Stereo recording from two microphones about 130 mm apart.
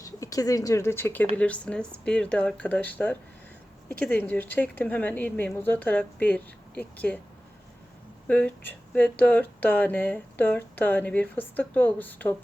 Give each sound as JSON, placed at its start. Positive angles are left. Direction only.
{"t": 0.0, "sound": "speech", "side_deg": 25}
{"t": 8.3, "sound": "speech", "side_deg": 10}